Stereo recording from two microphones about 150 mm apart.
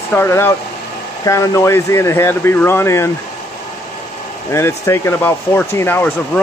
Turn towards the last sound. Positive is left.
turn(degrees=15)  # may be behind; listen again after turning